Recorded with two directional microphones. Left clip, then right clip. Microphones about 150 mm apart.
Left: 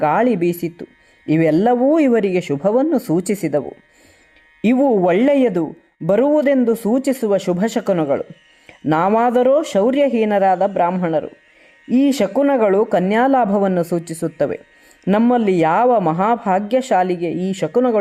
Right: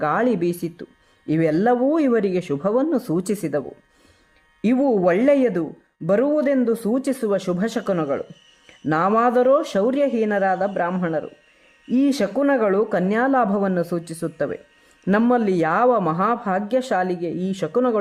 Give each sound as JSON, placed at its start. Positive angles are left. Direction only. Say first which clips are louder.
{"t": 0.0, "sound": "a woman's voice", "louder": "left 5 dB", "side_deg": 20}
{"t": 4.6, "sound": "a woman's voice", "louder": "left 4 dB", "side_deg": 25}